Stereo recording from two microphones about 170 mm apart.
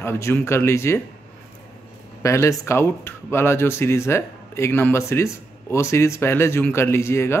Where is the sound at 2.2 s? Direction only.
15° left (ahead or behind).